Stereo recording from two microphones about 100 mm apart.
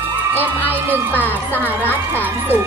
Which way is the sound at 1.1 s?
20° left (ahead or behind).